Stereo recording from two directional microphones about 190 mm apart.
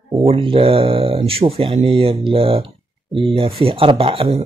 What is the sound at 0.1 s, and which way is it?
Speech, 30° right (ahead or behind).